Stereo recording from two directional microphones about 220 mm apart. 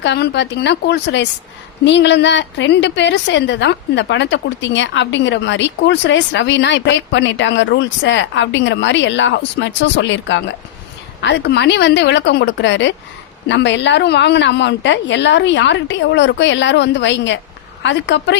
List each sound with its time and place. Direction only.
0.0 s a woman's voice: 50° left (ahead or behind)